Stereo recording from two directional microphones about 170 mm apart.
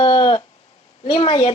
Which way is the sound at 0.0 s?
30° left (ahead or behind).